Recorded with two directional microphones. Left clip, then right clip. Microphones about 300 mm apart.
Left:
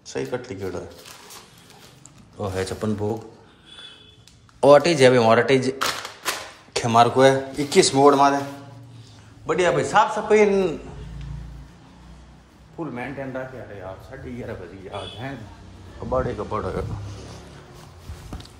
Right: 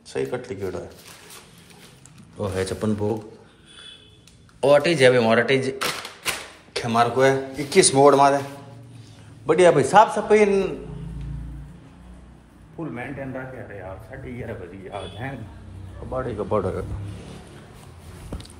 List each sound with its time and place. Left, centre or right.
0.0 s speech: centre
2.3 s speech: centre
4.6 s a man's voice: centre
9.5 s speech: centre; by 10.7 s left
14.2 s speech: centre
16.3 s speech: centre